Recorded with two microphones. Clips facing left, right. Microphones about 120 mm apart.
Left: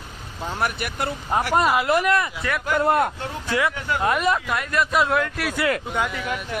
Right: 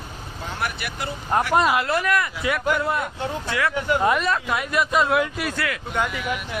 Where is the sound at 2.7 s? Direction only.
50° left (ahead or behind).